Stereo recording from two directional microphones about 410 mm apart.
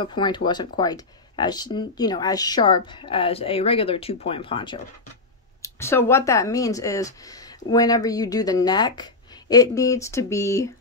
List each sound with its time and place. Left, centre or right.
0.0 s speech: centre